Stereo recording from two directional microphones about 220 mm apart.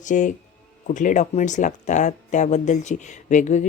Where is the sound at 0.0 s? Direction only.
35° left (ahead or behind).